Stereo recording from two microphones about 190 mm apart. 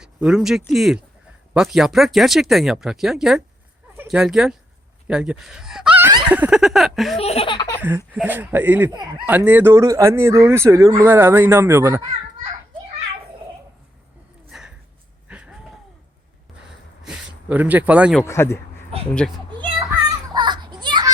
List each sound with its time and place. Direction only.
0.0 s speech: 5° right (ahead or behind)
7.2 s laughter: 30° left (ahead or behind)
7.8 s speech: 10° right (ahead or behind)
14.5 s a sound: 5° right (ahead or behind)
15.3 s vehicle: 5° right (ahead or behind)
17.0 s a sound: 5° right (ahead or behind)
18.2 s a man's voice: 15° left (ahead or behind)
20.3 s children playing: 25° right (ahead or behind)